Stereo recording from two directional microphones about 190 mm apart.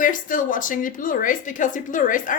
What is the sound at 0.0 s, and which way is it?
A woman's voice, 45° left (ahead or behind).